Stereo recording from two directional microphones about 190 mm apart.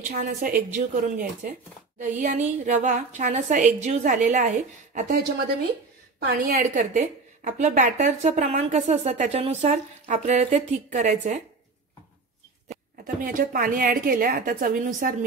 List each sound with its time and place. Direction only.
0.0 s a woman's voice: 50° right (ahead or behind)
6.1 s a woman's voice: 55° right (ahead or behind)
13.0 s a woman's voice: 45° right (ahead or behind)